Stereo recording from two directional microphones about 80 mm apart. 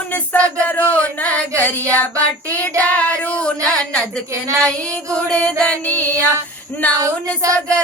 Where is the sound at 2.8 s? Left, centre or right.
Centre.